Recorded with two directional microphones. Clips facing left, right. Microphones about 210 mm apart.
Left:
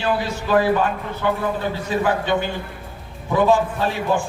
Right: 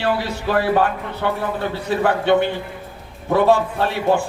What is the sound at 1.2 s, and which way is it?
A man's voice, 60° right (ahead or behind).